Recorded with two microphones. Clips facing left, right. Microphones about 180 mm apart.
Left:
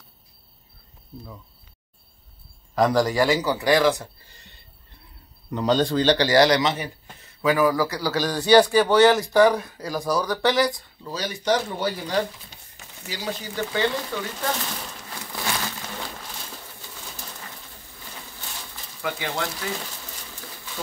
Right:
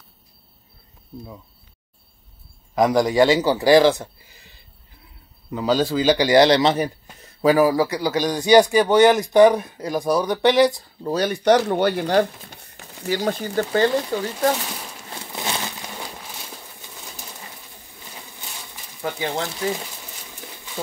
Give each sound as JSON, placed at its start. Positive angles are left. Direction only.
{"t": 2.7, "sound": "a man's voice", "side_deg": -15}
{"t": 4.2, "sound": "a sound", "side_deg": -5}
{"t": 5.5, "sound": "a man's voice", "side_deg": -5}
{"t": 11.0, "sound": "speech", "side_deg": -50}
{"t": 14.1, "sound": "speech", "side_deg": -35}
{"t": 15.0, "sound": "a sound", "side_deg": -20}
{"t": 18.7, "sound": "pigeon", "side_deg": -20}
{"t": 19.1, "sound": "a man's voice", "side_deg": -25}